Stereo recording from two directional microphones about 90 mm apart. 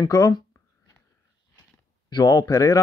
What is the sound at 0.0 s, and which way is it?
Speech, 50° left (ahead or behind).